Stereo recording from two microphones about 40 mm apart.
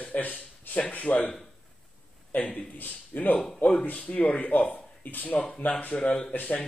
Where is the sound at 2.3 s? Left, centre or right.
Left.